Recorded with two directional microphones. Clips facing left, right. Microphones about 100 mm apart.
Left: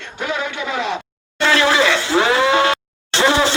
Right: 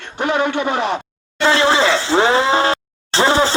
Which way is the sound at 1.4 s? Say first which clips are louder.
Right 1 dB; 30° right (ahead or behind).